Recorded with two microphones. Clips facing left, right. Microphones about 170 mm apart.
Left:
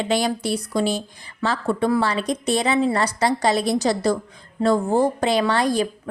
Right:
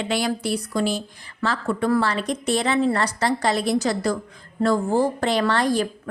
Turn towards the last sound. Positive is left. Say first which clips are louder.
# left 1 dB
turn(degrees=10)  # may be behind; listen again after turning